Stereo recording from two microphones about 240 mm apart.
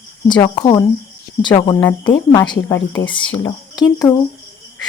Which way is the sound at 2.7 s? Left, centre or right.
Left.